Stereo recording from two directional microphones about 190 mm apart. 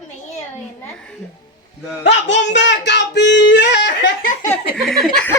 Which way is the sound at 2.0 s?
70° left (ahead or behind).